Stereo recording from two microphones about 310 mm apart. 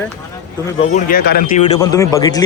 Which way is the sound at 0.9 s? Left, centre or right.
Left.